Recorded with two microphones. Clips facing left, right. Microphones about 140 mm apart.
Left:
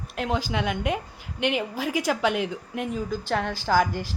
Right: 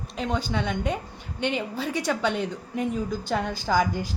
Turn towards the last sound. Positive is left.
turn(degrees=5)  # may be behind; listen again after turning